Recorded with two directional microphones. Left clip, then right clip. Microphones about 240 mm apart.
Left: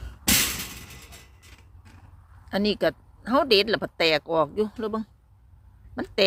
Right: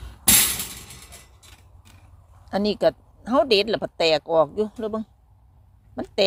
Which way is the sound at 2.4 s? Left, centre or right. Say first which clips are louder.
Right 3 dB; centre.